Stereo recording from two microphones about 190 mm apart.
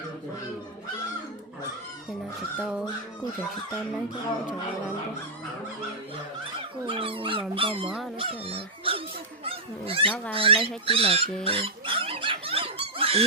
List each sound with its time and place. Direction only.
2.6 s speech: 5° right (ahead or behind)
6.8 s speech: 30° right (ahead or behind)
7.9 s speech: centre (ahead or behind)
8.2 s speech: 30° right (ahead or behind)
9.4 s a sound: 30° right (ahead or behind)
10.3 s speech: 30° right (ahead or behind)
11.4 s dog: 30° right (ahead or behind)